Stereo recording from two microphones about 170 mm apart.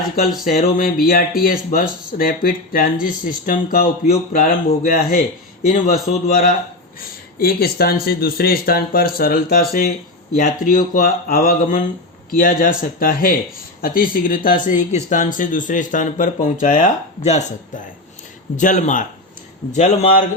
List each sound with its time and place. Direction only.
0.2 s speech: 60° left (ahead or behind)
6.1 s speech: 40° left (ahead or behind)
7.3 s speech: 60° left (ahead or behind); by 20.1 s 45° left (ahead or behind)